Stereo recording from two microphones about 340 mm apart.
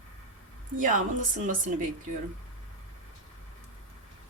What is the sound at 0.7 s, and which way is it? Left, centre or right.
Speech, right.